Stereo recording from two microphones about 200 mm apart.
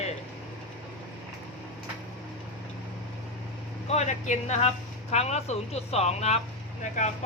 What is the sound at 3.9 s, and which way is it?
Speech, 35° left (ahead or behind).